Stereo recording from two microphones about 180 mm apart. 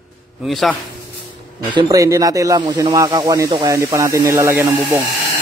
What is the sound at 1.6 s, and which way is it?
Speech, 20° right (ahead or behind).